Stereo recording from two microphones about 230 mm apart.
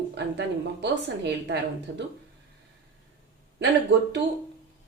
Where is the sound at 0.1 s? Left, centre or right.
Right.